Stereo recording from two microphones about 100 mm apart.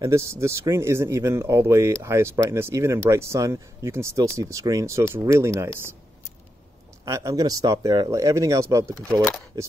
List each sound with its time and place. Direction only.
0.0 s speech: 30° right (ahead or behind)
7.1 s speech: 30° right (ahead or behind)